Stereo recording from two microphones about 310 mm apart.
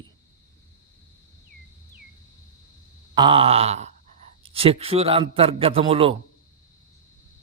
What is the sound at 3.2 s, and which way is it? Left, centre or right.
Groan, centre.